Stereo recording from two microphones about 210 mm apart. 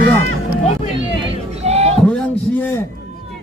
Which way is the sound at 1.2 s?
30° right (ahead or behind).